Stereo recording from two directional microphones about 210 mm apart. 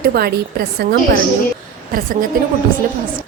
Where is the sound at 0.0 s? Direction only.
45° right (ahead or behind).